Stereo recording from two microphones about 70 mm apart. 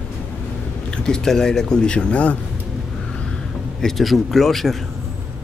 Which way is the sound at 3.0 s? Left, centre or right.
Centre.